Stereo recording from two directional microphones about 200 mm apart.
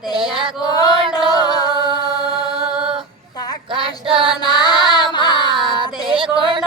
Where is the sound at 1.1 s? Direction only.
20° left (ahead or behind).